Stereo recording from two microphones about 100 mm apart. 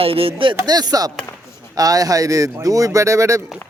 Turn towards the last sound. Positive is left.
turn(degrees=-30)  # may be behind; listen again after turning